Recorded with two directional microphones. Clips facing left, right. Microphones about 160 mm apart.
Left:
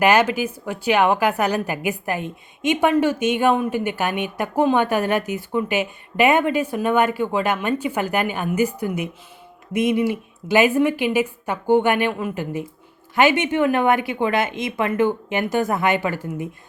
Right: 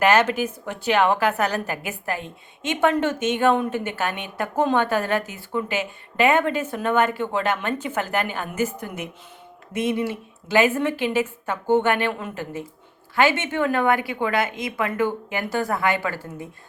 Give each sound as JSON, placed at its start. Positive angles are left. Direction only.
{"t": 0.0, "sound": "a woman's voice", "side_deg": 10}